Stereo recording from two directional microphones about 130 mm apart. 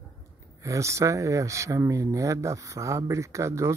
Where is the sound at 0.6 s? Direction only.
25° right (ahead or behind).